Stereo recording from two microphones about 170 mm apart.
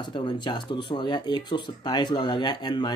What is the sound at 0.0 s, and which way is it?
Speech, 25° left (ahead or behind).